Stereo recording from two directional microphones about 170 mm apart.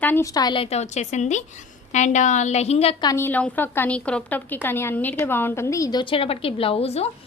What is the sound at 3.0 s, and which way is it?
A woman's voice, 15° left (ahead or behind).